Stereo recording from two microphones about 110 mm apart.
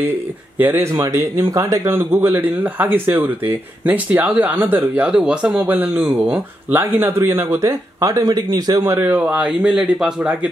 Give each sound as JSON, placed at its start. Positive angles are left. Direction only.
{"t": 0.6, "sound": "speech", "side_deg": -20}
{"t": 5.7, "sound": "speech", "side_deg": -15}
{"t": 8.8, "sound": "speech", "side_deg": -20}